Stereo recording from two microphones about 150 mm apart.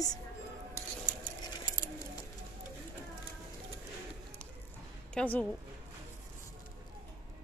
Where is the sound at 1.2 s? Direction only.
30° left (ahead or behind).